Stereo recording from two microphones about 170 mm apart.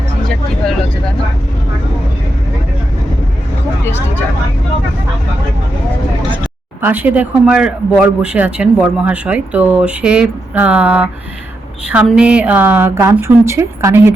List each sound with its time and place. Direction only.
3.8 s speech: 15° left (ahead or behind)
6.8 s a man's voice: 10° right (ahead or behind)